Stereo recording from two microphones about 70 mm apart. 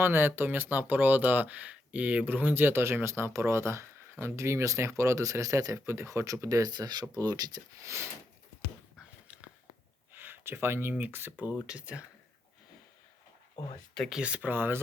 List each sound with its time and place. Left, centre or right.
0.0 s speech: right
6.6 s speech: right
9.2 s a sound: right
10.9 s speech: right
14.1 s speech: centre
14.5 s speech: right